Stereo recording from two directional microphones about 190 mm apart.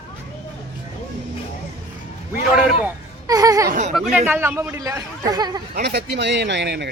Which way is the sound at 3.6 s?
45° right (ahead or behind).